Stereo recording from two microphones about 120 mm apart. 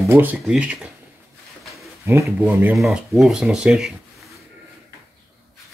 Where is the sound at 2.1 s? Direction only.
20° right (ahead or behind).